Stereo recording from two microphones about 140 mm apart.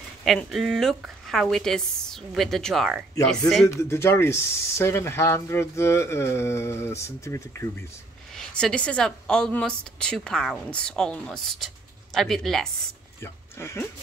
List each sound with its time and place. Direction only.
0.2 s a woman's voice: centre (ahead or behind)
3.6 s speech: 20° left (ahead or behind)
8.3 s a woman's voice: 5° left (ahead or behind)
13.2 s speech: 20° left (ahead or behind)